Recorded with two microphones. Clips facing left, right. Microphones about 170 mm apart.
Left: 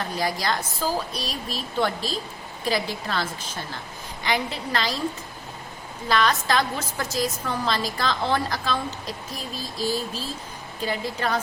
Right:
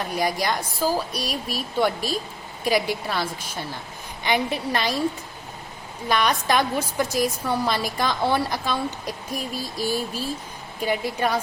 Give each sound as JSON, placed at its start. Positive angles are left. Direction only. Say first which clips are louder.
{"t": 0.1, "sound": "a woman's voice", "louder": "right 3 dB", "side_deg": -15}
{"t": 6.1, "sound": "a woman's voice", "louder": "right 1 dB", "side_deg": -15}